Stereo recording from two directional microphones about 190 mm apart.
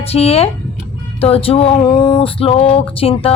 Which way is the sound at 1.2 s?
30° left (ahead or behind).